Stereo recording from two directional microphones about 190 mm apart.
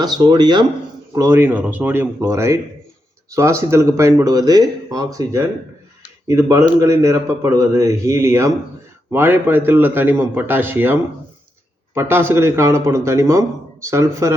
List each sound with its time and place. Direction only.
0.0 s a man's voice: 20° right (ahead or behind)